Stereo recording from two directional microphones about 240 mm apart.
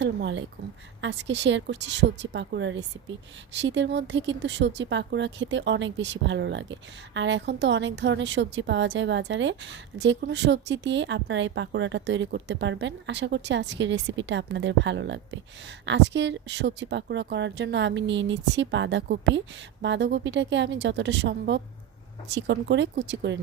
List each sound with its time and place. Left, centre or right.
0.0 s speech: right